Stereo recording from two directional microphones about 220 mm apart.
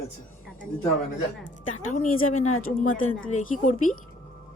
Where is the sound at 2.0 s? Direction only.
75° left (ahead or behind).